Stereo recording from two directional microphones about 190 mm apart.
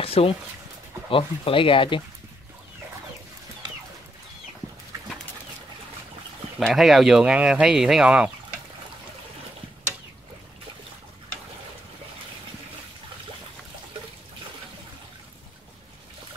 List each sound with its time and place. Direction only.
0.0 s a sound: 30° left (ahead or behind)
1.1 s speech: 30° left (ahead or behind)
6.6 s speech: centre (ahead or behind)